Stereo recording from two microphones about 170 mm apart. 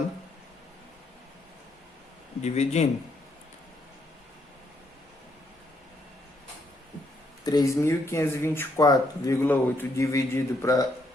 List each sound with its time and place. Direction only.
2.4 s a man's voice: 40° left (ahead or behind)
7.4 s speech: 20° left (ahead or behind)